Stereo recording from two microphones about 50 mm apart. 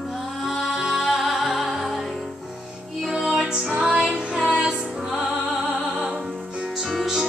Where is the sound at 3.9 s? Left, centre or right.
Right.